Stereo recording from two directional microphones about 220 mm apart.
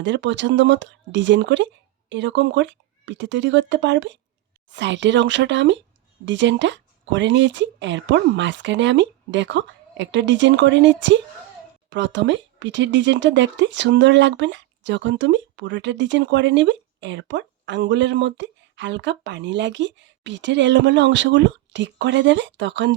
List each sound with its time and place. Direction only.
0.0 s speech: 55° right (ahead or behind)